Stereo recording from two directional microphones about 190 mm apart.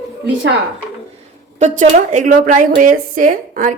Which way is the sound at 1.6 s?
40° right (ahead or behind).